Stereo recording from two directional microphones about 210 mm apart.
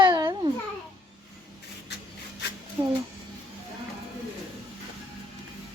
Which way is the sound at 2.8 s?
25° right (ahead or behind).